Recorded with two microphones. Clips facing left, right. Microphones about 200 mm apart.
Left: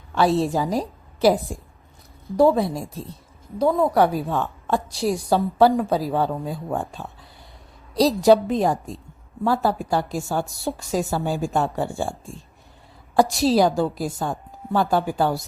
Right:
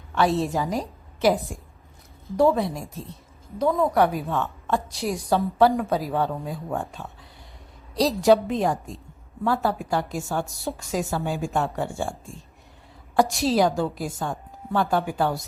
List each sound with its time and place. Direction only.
0.1 s a woman's voice: 35° left (ahead or behind)
13.1 s a woman's voice: 35° left (ahead or behind)